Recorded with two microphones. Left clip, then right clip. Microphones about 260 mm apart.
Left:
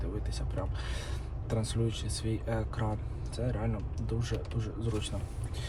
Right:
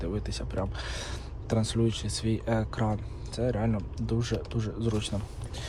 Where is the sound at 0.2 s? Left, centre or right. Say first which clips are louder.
Right 5 dB; right.